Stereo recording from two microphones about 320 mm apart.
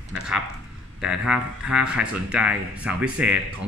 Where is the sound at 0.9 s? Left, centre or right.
Centre.